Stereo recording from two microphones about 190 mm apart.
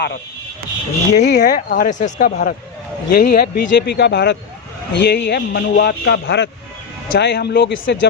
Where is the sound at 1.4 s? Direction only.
45° left (ahead or behind).